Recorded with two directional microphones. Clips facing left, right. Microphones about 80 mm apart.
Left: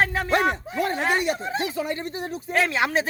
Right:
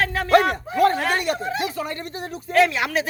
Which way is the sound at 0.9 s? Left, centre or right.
Left.